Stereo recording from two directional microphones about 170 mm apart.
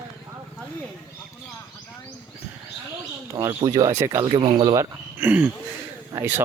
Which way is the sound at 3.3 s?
20° right (ahead or behind).